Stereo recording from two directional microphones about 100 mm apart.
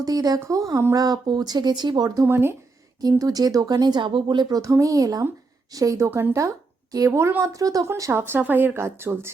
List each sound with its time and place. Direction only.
0.0 s speech: 40° right (ahead or behind)
2.2 s speech: 25° right (ahead or behind)
3.0 s speech: 40° right (ahead or behind)
8.2 s speech: 20° right (ahead or behind)